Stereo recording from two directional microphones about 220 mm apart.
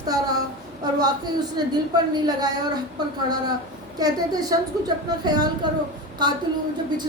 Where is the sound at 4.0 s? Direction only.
15° right (ahead or behind).